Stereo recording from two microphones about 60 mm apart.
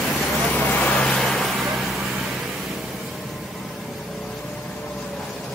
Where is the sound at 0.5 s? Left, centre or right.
Left.